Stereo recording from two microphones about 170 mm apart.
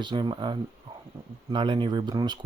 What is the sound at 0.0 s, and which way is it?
Speech, 25° right (ahead or behind).